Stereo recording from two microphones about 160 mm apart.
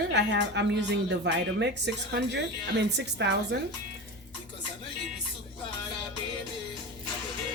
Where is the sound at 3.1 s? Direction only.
90° right.